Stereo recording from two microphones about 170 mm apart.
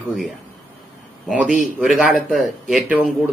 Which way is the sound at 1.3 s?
5° right (ahead or behind).